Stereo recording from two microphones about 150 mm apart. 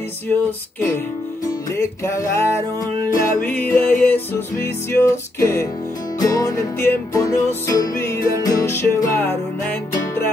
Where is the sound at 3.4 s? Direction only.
10° left (ahead or behind).